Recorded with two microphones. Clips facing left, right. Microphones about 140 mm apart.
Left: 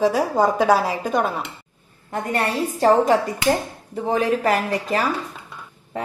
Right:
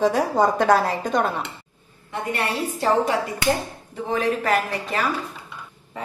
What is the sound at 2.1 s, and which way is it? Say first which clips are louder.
A woman's voice: left 3 dB; 40° left (ahead or behind).